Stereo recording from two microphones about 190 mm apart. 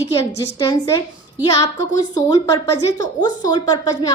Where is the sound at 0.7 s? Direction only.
15° left (ahead or behind).